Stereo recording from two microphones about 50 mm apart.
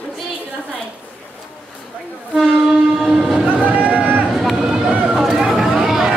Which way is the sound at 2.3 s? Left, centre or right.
Centre.